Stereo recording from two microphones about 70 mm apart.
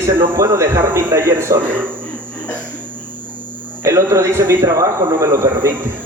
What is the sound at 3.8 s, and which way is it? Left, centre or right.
A man's voice, right.